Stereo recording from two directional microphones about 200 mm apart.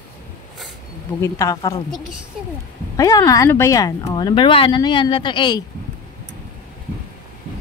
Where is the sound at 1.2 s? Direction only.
15° left (ahead or behind).